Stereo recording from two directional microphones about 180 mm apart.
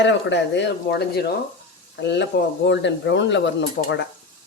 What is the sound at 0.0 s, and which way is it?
Speech, 85° left.